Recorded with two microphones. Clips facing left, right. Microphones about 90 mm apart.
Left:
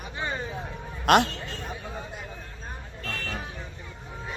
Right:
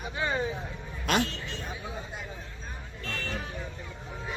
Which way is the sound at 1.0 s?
60° left (ahead or behind).